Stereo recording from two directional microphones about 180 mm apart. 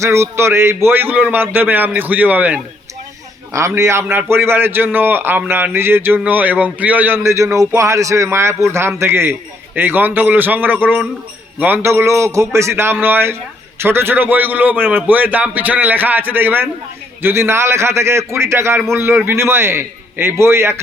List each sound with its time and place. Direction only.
0.0 s a man's voice: 15° right (ahead or behind)